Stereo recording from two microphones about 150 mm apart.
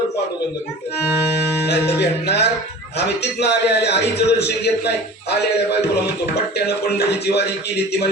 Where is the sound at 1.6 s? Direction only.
90° left.